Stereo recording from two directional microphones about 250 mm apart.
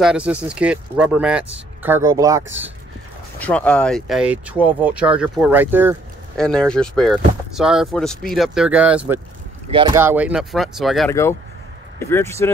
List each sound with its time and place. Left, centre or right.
0.0 s speech: centre
3.3 s speech: centre
6.3 s speech: centre
9.7 s speech: right
9.9 s speech: centre